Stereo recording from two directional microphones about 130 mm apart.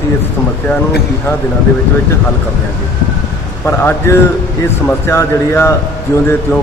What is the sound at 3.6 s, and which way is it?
Speech, 20° left (ahead or behind).